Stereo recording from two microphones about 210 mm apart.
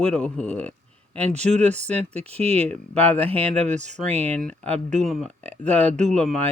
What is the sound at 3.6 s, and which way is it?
Speech, 35° right (ahead or behind).